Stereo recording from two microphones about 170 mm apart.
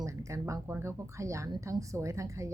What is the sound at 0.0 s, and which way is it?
A woman's voice, 15° right (ahead or behind).